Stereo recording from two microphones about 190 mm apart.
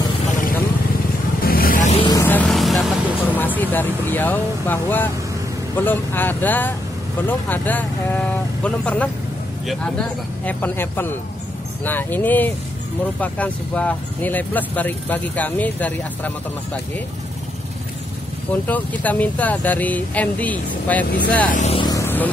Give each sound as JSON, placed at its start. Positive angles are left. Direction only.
{"t": 1.4, "sound": "vehicle", "side_deg": 50}
{"t": 2.0, "sound": "vehicle", "side_deg": 20}
{"t": 2.2, "sound": "vehicle", "side_deg": 10}
{"t": 5.8, "sound": "speech", "side_deg": 10}
{"t": 10.4, "sound": "speech", "side_deg": 10}
{"t": 18.5, "sound": "speech", "side_deg": 10}
{"t": 21.5, "sound": "speech", "side_deg": 40}
{"t": 21.7, "sound": "vehicle", "side_deg": 20}